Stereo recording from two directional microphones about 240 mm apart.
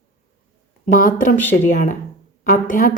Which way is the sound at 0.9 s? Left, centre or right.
Left.